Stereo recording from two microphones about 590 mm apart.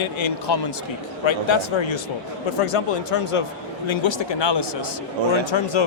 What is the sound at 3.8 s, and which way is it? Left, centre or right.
A man's voice, left.